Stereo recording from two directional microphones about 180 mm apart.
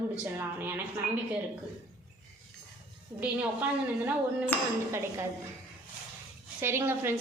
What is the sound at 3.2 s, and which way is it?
Speech, 10° right (ahead or behind).